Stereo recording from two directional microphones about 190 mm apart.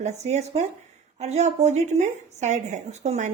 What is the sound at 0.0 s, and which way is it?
Speech, 35° right (ahead or behind).